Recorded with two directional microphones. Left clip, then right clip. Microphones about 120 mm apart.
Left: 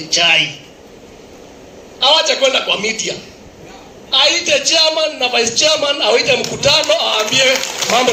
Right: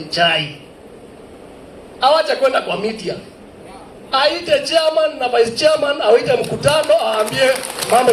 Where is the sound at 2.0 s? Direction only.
90° right.